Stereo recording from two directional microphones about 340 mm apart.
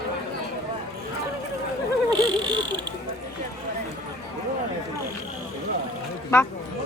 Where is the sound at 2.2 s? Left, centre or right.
Centre.